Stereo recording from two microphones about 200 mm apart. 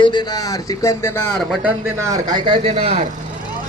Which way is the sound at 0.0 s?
20° left (ahead or behind).